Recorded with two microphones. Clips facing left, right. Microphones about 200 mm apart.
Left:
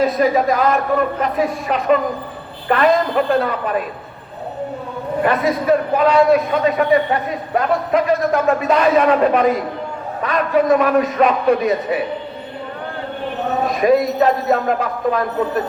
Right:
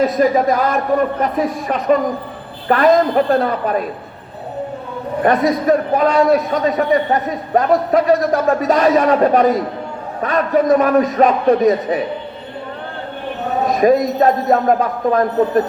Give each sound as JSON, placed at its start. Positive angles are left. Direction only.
{"t": 0.2, "sound": "a man's voice", "side_deg": -40}
{"t": 5.2, "sound": "a man's voice", "side_deg": -40}
{"t": 13.8, "sound": "speech", "side_deg": -45}